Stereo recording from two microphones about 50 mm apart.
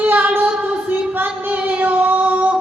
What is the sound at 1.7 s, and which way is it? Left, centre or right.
Singing, right.